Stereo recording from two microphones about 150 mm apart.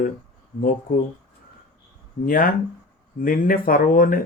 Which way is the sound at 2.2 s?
70° left (ahead or behind).